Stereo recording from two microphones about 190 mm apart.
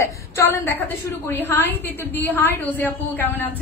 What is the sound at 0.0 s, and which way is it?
A woman's voice, 15° left (ahead or behind).